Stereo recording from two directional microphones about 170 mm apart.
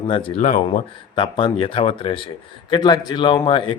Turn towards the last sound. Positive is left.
turn(degrees=30)  # may be behind; listen again after turning